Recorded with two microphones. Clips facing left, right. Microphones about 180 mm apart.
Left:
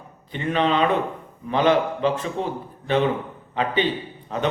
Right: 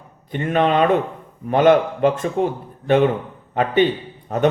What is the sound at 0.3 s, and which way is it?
A man's voice, 50° right (ahead or behind).